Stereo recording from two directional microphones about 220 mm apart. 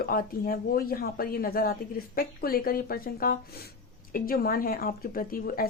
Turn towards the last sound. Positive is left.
turn(degrees=40)  # may be behind; listen again after turning